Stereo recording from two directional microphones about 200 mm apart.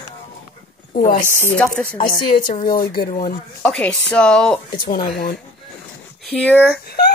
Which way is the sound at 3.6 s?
5° left (ahead or behind).